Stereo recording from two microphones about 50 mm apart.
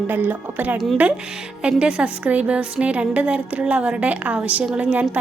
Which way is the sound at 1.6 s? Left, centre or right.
Right.